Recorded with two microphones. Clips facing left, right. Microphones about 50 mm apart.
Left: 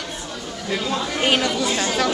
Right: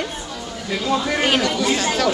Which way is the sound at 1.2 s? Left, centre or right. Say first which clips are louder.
Right 1 dB; centre.